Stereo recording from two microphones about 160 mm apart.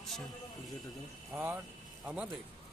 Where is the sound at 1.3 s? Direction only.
15° right (ahead or behind).